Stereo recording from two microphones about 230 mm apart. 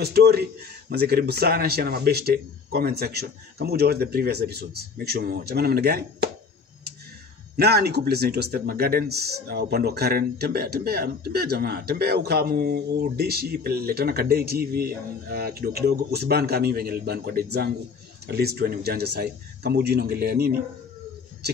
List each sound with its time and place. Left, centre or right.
0.0 s speech: right
7.5 s speech: right